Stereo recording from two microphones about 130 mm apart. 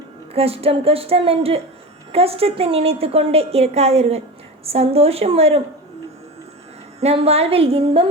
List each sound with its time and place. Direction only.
0.3 s a woman's voice: 50° right (ahead or behind)
7.0 s a woman's voice: 50° right (ahead or behind)